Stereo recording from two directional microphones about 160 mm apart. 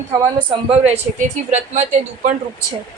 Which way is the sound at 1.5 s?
45° right (ahead or behind).